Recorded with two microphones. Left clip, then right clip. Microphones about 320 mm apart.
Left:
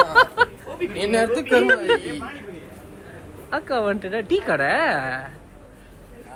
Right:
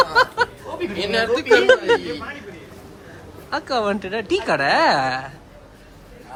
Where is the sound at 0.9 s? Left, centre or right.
Left.